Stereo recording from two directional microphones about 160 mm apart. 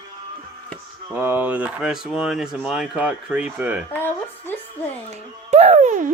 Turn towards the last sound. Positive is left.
turn(degrees=-50)  # may be behind; listen again after turning